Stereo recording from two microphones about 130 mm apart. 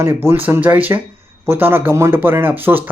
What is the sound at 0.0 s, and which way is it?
Speech, 20° right (ahead or behind).